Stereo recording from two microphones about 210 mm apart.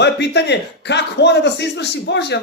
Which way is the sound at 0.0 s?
55° left (ahead or behind).